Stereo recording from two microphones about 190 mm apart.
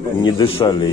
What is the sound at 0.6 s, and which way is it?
Speech, 20° left (ahead or behind).